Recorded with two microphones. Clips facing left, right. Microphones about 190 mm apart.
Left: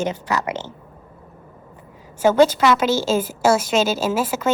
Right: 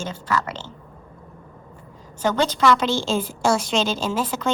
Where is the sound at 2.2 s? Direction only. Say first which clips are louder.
Left 5 dB; 10° left (ahead or behind).